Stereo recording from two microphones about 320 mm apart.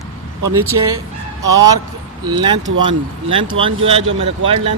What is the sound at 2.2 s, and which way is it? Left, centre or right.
Speech, centre.